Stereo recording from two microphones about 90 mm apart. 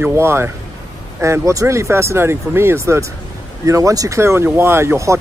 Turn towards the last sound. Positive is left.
turn(degrees=-30)  # may be behind; listen again after turning